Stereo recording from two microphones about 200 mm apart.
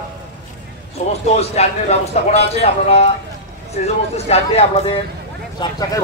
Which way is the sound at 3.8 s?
30° left (ahead or behind).